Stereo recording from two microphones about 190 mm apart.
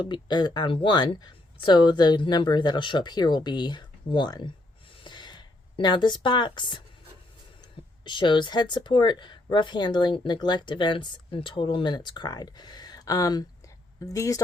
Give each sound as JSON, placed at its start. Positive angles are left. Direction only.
{"t": 0.0, "sound": "speech", "side_deg": 25}
{"t": 5.0, "sound": "a sound", "side_deg": 25}
{"t": 7.6, "sound": "speech", "side_deg": 25}